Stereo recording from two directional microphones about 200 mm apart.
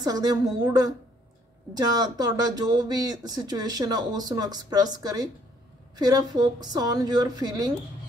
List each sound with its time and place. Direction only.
0.0 s speech: 20° right (ahead or behind)